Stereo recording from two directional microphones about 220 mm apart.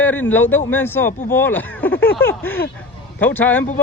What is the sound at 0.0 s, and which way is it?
A man's voice, 10° left (ahead or behind).